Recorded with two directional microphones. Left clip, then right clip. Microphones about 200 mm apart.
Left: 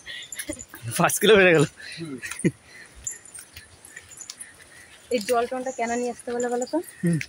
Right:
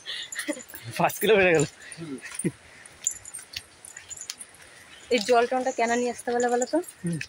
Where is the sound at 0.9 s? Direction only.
30° left (ahead or behind).